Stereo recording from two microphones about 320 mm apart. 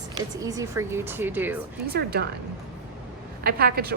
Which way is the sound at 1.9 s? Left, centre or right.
Right.